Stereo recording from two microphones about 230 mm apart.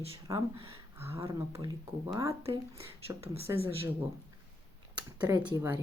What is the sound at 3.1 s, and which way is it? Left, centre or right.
Speech, centre.